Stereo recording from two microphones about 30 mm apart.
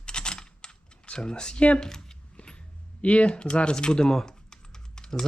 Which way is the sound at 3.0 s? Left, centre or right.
Left.